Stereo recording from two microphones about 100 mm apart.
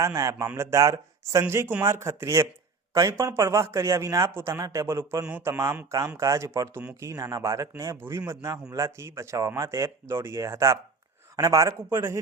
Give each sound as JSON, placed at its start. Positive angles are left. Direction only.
{"t": 0.0, "sound": "speech", "side_deg": -30}